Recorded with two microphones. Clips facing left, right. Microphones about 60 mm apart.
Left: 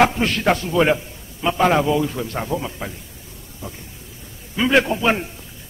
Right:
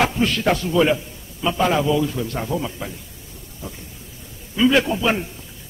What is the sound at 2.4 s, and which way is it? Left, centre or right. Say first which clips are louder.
Speech: even; centre.